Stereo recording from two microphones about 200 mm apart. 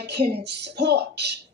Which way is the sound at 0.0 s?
55° right (ahead or behind).